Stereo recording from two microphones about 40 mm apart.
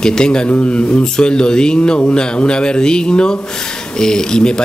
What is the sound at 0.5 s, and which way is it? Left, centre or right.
Speech, left.